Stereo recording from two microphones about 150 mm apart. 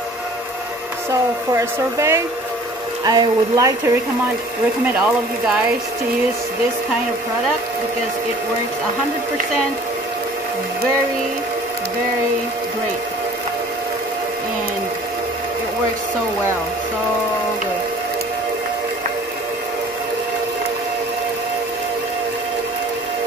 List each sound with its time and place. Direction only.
1.5 s speech: 20° right (ahead or behind)